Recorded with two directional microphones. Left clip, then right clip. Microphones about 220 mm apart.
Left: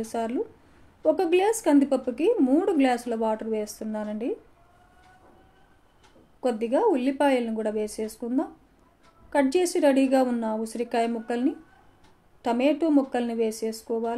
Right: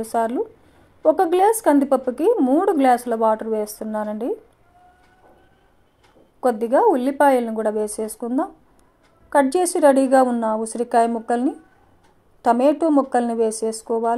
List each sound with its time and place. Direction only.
0.0 s a woman's voice: 20° right (ahead or behind)
6.4 s a woman's voice: 20° right (ahead or behind)